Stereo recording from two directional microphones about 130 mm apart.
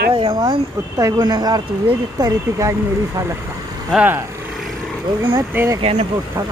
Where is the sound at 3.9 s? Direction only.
15° right (ahead or behind).